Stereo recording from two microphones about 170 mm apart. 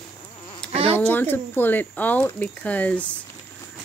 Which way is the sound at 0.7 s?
35° right (ahead or behind).